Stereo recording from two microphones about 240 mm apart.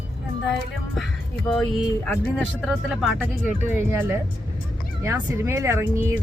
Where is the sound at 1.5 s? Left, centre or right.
Centre.